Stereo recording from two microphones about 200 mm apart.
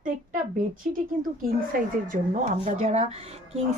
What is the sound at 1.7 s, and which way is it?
Speech, 45° right (ahead or behind).